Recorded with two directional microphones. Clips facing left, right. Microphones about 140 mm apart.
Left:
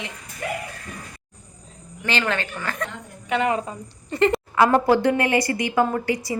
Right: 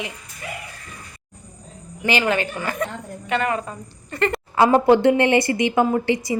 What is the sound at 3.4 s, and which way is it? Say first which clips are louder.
Speech: left 3 dB; 20° left (ahead or behind).